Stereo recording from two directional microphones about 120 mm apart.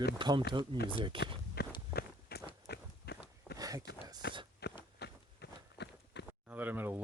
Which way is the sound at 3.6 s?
30° right (ahead or behind).